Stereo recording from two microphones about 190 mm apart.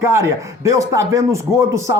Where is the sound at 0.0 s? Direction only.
15° right (ahead or behind).